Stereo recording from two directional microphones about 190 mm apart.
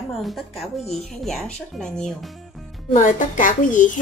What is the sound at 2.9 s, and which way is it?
Speech, 45° left (ahead or behind).